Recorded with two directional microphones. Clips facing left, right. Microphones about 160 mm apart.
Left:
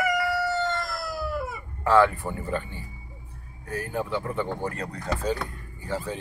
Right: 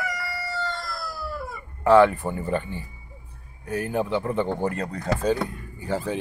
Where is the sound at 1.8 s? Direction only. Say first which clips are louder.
Right 4 dB; 20° right (ahead or behind).